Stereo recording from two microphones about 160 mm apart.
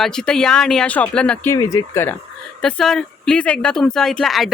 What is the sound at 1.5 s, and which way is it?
Speech, 15° left (ahead or behind).